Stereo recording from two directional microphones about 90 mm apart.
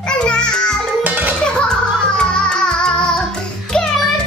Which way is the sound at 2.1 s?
10° left (ahead or behind).